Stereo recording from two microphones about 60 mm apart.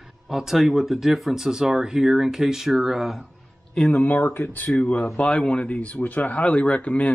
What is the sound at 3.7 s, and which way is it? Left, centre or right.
Speech, centre.